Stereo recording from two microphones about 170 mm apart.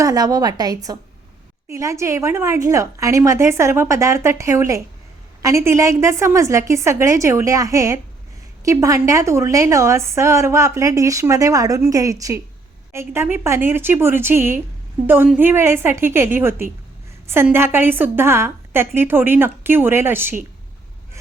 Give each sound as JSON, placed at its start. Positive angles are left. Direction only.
{"t": 0.0, "sound": "a woman's voice", "side_deg": -20}